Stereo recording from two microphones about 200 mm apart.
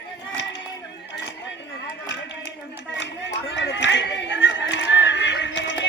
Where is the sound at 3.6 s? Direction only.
60° left (ahead or behind).